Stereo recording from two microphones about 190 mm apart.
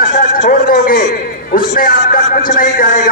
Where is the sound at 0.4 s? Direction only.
45° left (ahead or behind).